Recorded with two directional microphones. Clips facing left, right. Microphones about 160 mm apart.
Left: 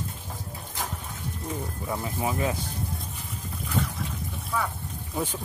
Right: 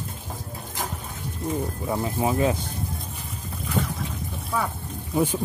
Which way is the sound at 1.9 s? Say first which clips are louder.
Right 4 dB; 25° right (ahead or behind).